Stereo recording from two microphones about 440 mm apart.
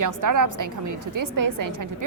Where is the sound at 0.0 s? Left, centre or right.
Right.